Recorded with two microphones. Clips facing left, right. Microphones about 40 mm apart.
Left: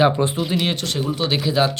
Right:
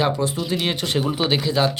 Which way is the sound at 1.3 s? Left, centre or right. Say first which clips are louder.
Left 2 dB; centre.